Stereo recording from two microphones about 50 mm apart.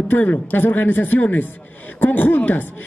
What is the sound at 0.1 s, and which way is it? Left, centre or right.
A man's voice, left.